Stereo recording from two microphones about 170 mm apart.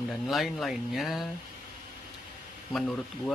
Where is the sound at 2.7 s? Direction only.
5° left (ahead or behind).